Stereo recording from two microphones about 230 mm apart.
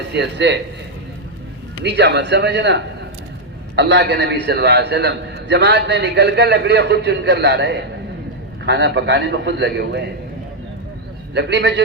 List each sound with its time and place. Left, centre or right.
0.1 s a man's voice: right
1.8 s a man's voice: right
11.3 s a man's voice: right